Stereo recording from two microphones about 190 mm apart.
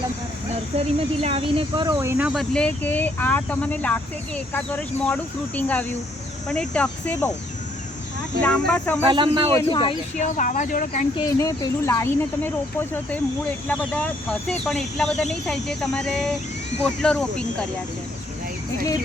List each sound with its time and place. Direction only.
1.2 s speech: 30° right (ahead or behind); by 7.3 s 5° left (ahead or behind)
8.4 s speech: 5° left (ahead or behind)
9.0 s speech: 25° right (ahead or behind)
9.6 s speech: 25° left (ahead or behind)
10.2 s speech: 40° left (ahead or behind)
11.3 s speech: 15° left (ahead or behind)